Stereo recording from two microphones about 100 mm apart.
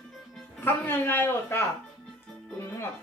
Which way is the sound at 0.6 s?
20° left (ahead or behind).